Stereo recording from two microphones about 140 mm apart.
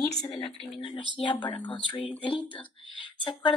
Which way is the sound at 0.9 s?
35° left (ahead or behind).